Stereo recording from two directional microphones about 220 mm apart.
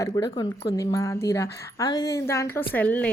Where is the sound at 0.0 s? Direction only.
15° left (ahead or behind).